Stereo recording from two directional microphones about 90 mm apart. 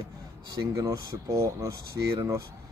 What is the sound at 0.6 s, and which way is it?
Speech, 40° right (ahead or behind).